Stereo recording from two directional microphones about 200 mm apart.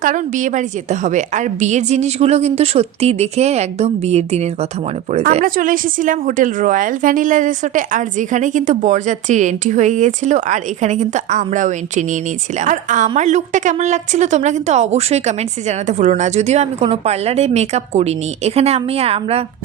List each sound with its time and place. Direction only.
0.0 s a woman's voice: 40° right (ahead or behind)